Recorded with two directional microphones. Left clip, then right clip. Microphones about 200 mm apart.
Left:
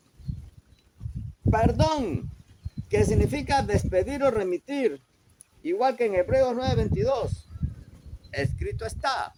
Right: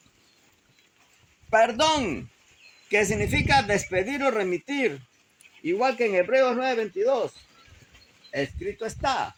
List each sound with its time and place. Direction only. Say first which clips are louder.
1.5 s speech: right 4 dB; 10° right (ahead or behind)
5.6 s speech: even; 30° right (ahead or behind)
6.3 s speech: right 2 dB; 15° right (ahead or behind)
8.3 s speech: right 2 dB; centre (ahead or behind)